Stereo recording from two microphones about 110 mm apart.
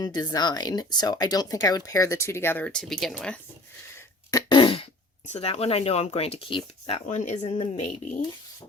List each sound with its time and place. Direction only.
0.0 s speech: 40° left (ahead or behind); by 3.3 s 5° left (ahead or behind)
4.3 s throat clearing: 40° left (ahead or behind); by 4.9 s 55° left (ahead or behind)
5.3 s speech: 70° left (ahead or behind); by 7.3 s 90° left
7.4 s speech: 80° left